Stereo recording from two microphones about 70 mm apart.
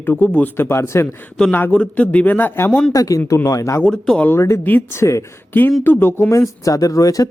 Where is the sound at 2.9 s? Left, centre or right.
Left.